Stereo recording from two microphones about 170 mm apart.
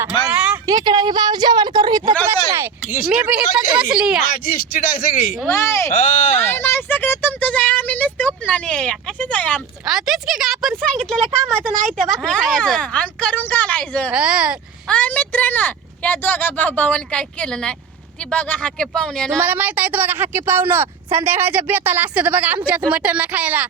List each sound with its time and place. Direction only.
0.3 s a sound: 10° right (ahead or behind)
0.7 s a woman's voice: 25° right (ahead or behind)
2.2 s speech: 15° right (ahead or behind)
4.4 s speech: 55° left (ahead or behind)
5.6 s speech: 15° left (ahead or behind)
6.3 s a sound: 15° left (ahead or behind)
8.4 s speech: 5° left (ahead or behind)
14.1 s speech: 5° right (ahead or behind)
14.8 s speech: 10° left (ahead or behind)
19.4 s speech: 10° right (ahead or behind)